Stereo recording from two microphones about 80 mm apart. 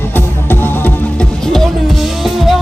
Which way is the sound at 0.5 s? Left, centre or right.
Left.